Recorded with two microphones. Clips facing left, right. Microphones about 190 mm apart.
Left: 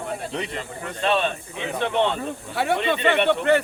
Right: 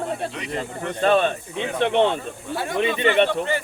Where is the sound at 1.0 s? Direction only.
45° right (ahead or behind).